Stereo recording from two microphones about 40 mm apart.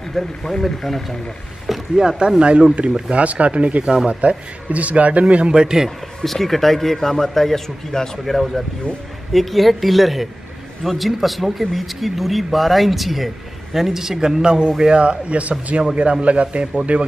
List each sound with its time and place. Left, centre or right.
0.1 s speech: centre
1.7 s speech: centre; by 3.8 s right
3.8 s speech: centre
4.1 s speech: right
5.5 s speech: centre
5.9 s speech: centre; by 17.0 s right